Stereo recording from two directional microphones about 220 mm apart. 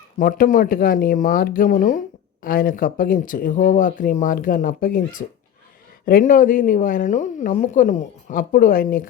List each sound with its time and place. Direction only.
0.2 s speech: 40° left (ahead or behind)